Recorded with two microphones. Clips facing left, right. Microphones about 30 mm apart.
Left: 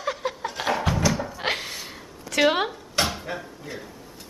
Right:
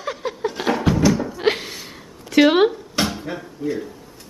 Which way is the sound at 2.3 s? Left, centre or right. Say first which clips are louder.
Right 7 dB; centre.